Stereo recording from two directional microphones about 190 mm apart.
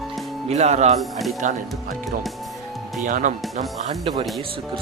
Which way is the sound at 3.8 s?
30° right (ahead or behind).